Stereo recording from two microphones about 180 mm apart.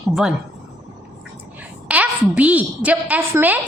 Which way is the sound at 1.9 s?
10° right (ahead or behind).